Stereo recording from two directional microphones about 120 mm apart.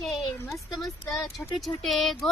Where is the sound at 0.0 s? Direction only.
Centre (ahead or behind).